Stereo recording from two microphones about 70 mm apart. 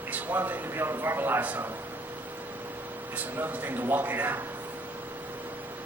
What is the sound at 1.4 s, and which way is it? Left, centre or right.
Speech, right.